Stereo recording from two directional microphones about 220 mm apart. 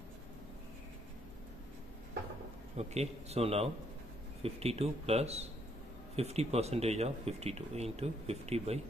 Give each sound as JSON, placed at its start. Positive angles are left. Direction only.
{"t": 2.9, "sound": "speech", "side_deg": -30}